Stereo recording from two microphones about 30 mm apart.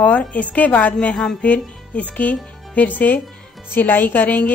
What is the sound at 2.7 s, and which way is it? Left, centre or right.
Speech, left.